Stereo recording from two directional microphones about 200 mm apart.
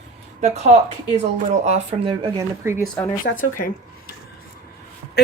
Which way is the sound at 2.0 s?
25° right (ahead or behind).